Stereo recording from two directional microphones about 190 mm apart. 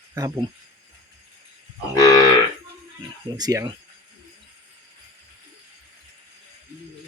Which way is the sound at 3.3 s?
20° right (ahead or behind).